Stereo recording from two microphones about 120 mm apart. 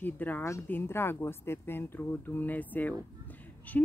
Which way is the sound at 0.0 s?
15° left (ahead or behind).